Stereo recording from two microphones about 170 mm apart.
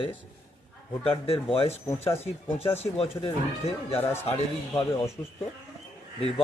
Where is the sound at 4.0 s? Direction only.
15° left (ahead or behind).